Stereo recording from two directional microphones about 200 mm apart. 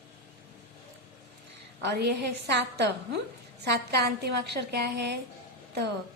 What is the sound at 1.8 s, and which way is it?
A woman's voice, 55° right (ahead or behind).